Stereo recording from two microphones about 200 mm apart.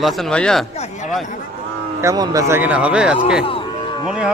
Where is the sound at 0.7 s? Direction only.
35° left (ahead or behind).